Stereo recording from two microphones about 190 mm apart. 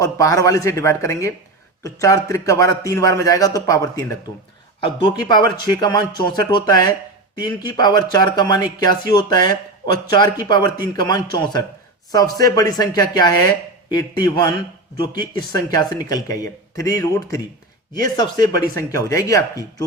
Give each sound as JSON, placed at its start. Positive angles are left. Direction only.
{"t": 0.0, "sound": "a man's voice", "side_deg": 15}